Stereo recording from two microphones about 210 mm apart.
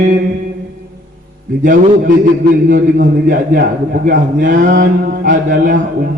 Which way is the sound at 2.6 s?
40° right (ahead or behind).